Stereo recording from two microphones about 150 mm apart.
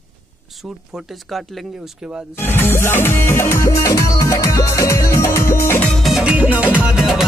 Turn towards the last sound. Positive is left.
turn(degrees=0)  # may be behind; listen again after turning